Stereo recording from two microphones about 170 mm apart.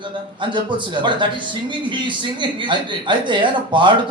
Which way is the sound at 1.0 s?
25° right (ahead or behind).